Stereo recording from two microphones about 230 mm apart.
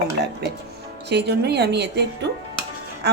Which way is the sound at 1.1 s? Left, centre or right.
Right.